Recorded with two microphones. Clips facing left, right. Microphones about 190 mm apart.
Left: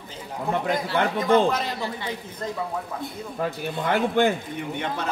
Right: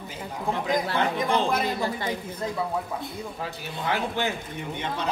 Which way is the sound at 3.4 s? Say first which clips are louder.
Left 5 dB; 55° left (ahead or behind).